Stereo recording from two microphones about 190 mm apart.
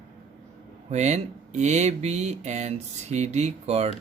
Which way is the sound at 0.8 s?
35° right (ahead or behind).